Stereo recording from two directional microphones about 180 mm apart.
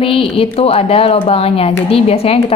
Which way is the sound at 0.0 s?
30° left (ahead or behind).